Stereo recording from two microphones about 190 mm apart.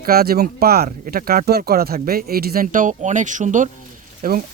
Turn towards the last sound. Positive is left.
turn(degrees=-50)  # may be behind; listen again after turning